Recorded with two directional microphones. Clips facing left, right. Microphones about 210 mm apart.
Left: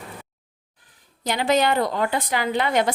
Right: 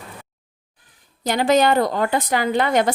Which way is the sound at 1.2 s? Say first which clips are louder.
Right 4 dB; 45° right (ahead or behind).